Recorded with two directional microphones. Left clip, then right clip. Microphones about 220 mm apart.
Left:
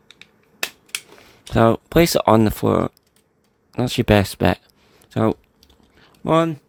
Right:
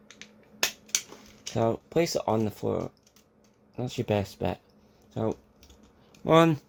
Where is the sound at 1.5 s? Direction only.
40° left (ahead or behind).